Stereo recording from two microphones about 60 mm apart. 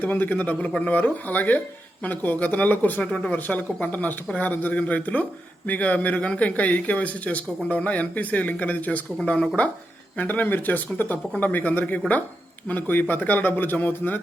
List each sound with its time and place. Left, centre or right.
0.0 s speech: left
3.0 s speech: centre
3.3 s speech: left
10.2 s a man's voice: left